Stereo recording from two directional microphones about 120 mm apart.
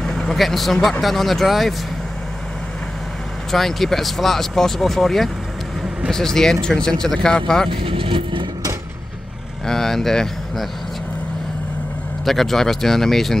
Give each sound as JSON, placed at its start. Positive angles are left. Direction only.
{"t": 0.0, "sound": "speech", "side_deg": 5}
{"t": 3.5, "sound": "speech", "side_deg": 0}
{"t": 7.7, "sound": "speech", "side_deg": -50}
{"t": 9.7, "sound": "speech", "side_deg": 5}
{"t": 12.3, "sound": "speech", "side_deg": 0}